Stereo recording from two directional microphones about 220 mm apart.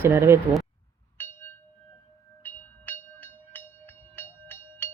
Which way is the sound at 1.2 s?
10° left (ahead or behind).